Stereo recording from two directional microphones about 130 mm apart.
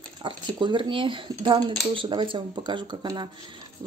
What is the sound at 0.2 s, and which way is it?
Speech, 40° right (ahead or behind).